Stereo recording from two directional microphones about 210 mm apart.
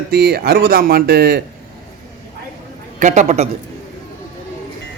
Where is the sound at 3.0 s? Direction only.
35° right (ahead or behind).